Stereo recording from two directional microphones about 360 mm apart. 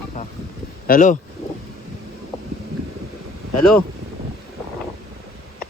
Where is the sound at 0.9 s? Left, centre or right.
Left.